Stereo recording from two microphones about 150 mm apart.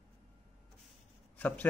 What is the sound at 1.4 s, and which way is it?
Speech, 10° left (ahead or behind).